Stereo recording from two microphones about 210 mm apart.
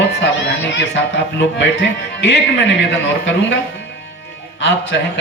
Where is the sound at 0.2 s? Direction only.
60° left (ahead or behind).